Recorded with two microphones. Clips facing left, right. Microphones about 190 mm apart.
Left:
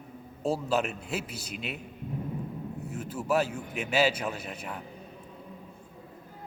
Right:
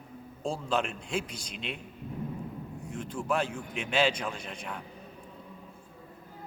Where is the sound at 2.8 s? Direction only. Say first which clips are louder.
Left 1 dB; 5° left (ahead or behind).